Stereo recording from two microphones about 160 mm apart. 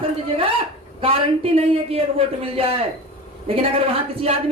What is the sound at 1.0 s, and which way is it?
A man's voice, 35° right (ahead or behind).